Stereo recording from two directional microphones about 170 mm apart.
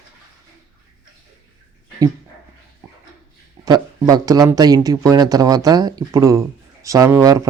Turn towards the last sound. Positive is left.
turn(degrees=-20)  # may be behind; listen again after turning